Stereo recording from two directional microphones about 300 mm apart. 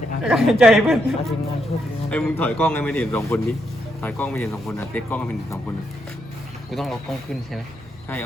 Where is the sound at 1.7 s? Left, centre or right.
Left.